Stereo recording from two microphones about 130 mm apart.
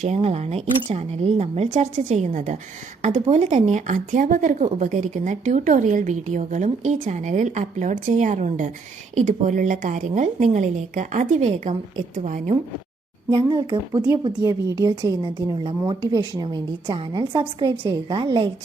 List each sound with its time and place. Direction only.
0.0 s a woman's voice: 55° right (ahead or behind); by 12.4 s 70° right (ahead or behind)
13.3 s a woman's voice: 40° right (ahead or behind)